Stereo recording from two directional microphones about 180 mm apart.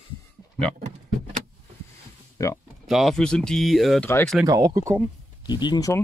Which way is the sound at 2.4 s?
15° left (ahead or behind).